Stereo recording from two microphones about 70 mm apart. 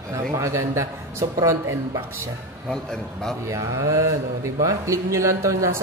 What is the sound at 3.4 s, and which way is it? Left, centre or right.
Speech, right.